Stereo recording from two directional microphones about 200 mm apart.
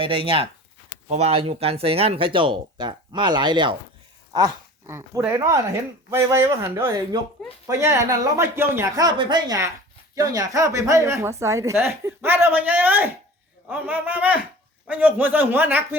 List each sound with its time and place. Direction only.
0.0 s speech: 25° right (ahead or behind); by 16.0 s 10° right (ahead or behind)